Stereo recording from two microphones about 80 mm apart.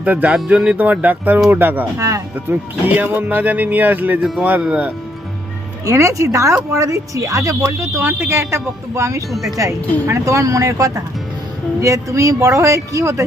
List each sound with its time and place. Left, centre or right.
0.0 s speech: centre
0.4 s speech: centre
0.8 s speech: right
2.0 s speech: right
2.8 s speech: right
5.8 s speech: right
9.3 s speech: centre
10.1 s speech: right